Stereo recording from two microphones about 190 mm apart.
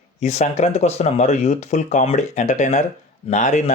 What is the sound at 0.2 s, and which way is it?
Speech, 35° left (ahead or behind).